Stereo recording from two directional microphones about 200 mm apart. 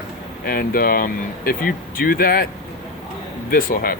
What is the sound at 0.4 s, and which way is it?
Speech, 45° left (ahead or behind).